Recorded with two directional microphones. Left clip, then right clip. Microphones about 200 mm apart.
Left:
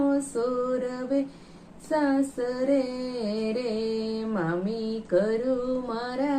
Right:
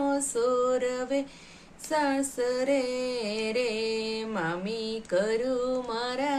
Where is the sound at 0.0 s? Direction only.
45° right (ahead or behind).